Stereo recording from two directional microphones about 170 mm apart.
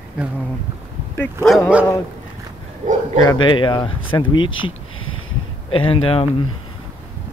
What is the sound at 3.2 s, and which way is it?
Speech, 25° left (ahead or behind).